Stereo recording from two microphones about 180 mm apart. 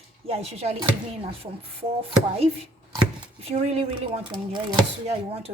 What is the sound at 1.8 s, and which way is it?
Speech, 35° right (ahead or behind).